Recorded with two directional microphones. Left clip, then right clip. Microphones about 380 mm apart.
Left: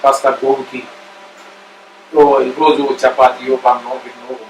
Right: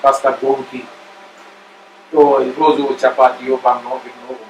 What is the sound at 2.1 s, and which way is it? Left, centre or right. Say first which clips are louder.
Speech: left 2 dB; centre.